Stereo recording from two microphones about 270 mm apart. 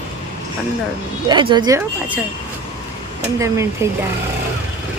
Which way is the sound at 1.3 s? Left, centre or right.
Centre.